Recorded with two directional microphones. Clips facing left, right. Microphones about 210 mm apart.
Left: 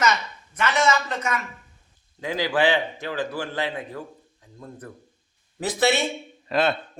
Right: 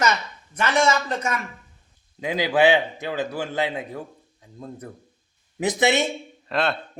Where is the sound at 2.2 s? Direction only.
15° right (ahead or behind).